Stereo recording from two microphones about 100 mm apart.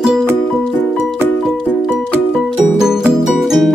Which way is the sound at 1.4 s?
5° right (ahead or behind).